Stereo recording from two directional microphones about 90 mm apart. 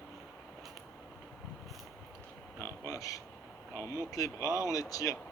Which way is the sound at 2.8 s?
35° left (ahead or behind).